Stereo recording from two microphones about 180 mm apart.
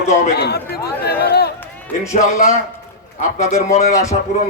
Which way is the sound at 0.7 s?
60° left (ahead or behind).